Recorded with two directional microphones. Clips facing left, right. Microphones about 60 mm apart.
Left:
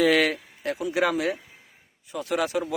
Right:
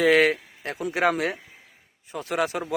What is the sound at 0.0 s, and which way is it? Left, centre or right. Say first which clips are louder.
Speech: right 2 dB; right.